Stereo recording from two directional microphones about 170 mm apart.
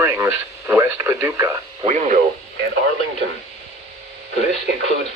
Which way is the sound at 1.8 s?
45° right (ahead or behind).